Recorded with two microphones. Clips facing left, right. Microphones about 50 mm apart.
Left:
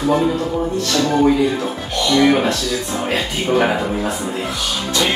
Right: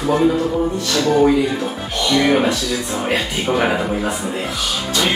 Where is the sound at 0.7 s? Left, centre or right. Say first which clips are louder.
Even; centre.